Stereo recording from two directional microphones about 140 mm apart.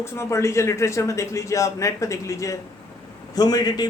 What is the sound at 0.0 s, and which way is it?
A man's voice, 20° left (ahead or behind).